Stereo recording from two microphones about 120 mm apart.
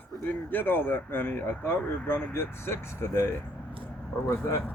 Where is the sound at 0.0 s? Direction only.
15° left (ahead or behind).